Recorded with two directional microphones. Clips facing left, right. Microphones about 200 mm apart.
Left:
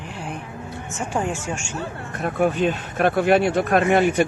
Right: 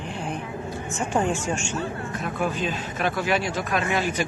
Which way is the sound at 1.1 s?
5° left (ahead or behind).